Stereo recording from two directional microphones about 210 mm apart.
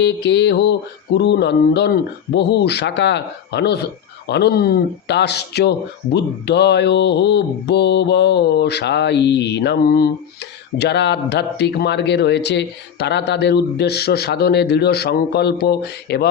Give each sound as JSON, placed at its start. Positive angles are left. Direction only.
{"t": 0.0, "sound": "speech", "side_deg": 55}